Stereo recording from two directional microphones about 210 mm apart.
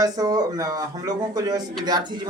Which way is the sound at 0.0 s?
20° right (ahead or behind).